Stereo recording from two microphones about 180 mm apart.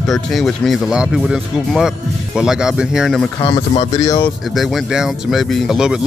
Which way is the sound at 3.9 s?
20° left (ahead or behind).